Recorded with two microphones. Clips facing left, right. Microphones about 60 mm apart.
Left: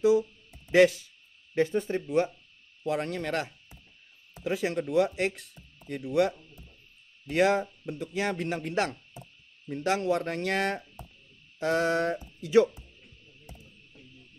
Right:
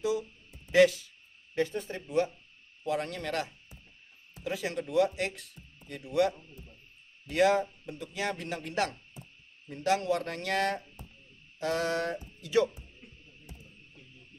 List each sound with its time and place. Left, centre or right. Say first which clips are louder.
0.7 s speech: left 2 dB; left